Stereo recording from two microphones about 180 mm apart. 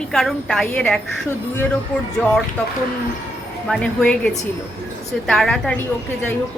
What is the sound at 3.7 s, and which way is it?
A woman's voice, 5° left (ahead or behind).